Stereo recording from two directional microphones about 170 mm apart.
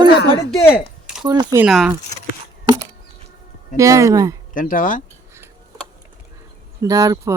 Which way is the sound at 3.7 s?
20° right (ahead or behind).